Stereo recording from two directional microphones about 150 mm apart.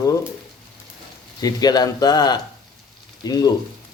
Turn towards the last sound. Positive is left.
turn(degrees=25)  # may be behind; listen again after turning